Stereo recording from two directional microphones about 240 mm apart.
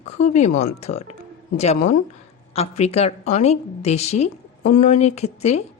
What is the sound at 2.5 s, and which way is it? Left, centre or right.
Speech, left.